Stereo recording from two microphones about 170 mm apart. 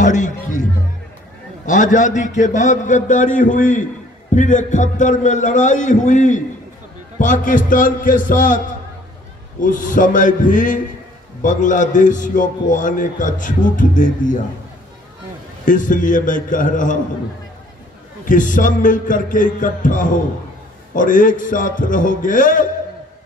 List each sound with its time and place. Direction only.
0.0 s speech: 45° left (ahead or behind)
1.7 s a man's voice: 50° left (ahead or behind)
15.6 s a man's voice: 50° left (ahead or behind)
18.2 s a man's voice: 50° left (ahead or behind)